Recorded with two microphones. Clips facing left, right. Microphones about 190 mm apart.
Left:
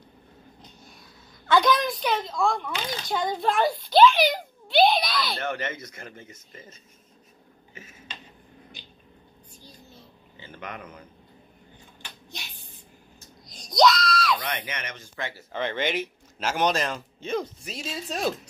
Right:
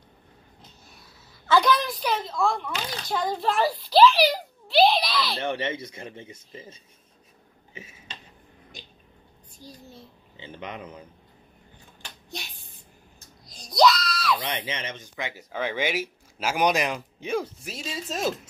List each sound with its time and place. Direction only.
0.6 s a sound: 5° right (ahead or behind)
1.5 s speech: 5° right (ahead or behind)
5.4 s speech: 30° right (ahead or behind)
10.3 s speech: 25° right (ahead or behind)
10.8 s speech: 10° right (ahead or behind)
13.6 s screaming: 5° right (ahead or behind)
14.4 s speech: 30° right (ahead or behind); by 18.5 s centre (ahead or behind)